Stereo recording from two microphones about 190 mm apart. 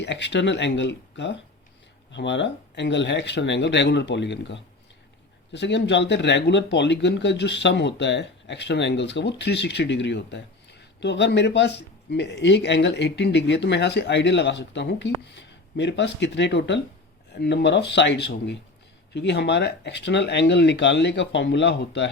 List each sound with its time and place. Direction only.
0.0 s speech: 65° left (ahead or behind)